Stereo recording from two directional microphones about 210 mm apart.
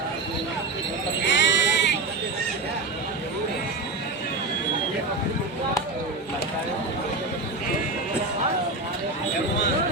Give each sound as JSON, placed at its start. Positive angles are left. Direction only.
{"t": 1.2, "sound": "sheep", "side_deg": 55}